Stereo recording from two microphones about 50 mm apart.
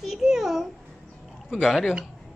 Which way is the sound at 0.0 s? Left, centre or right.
Centre.